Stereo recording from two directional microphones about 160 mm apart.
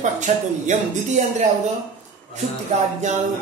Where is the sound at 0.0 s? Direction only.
50° right (ahead or behind).